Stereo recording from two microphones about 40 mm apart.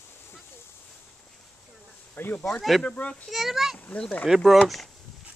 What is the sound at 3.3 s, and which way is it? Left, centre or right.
A child's voice, centre.